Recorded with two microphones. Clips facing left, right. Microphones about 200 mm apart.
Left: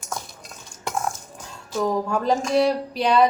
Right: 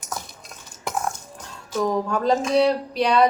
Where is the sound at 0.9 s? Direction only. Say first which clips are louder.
Even; centre (ahead or behind).